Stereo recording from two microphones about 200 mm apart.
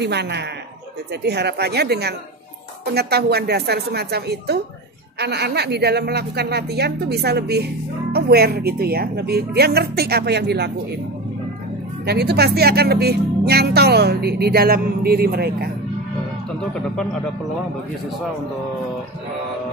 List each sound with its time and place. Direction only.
0.0 s a woman's voice: 55° right (ahead or behind)
12.1 s speech: 55° right (ahead or behind)
16.7 s speech: 5° left (ahead or behind)